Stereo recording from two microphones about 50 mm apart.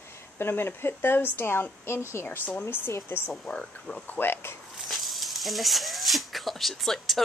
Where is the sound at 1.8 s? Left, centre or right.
Left.